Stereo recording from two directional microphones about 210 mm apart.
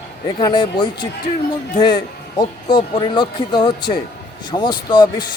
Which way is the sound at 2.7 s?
25° left (ahead or behind).